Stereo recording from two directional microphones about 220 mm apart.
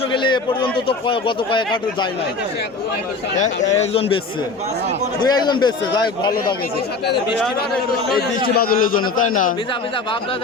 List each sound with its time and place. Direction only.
0.1 s a man's voice: 20° left (ahead or behind)
3.3 s a man's voice: 35° left (ahead or behind)
5.2 s a man's voice: 20° left (ahead or behind)
8.4 s a man's voice: 45° left (ahead or behind)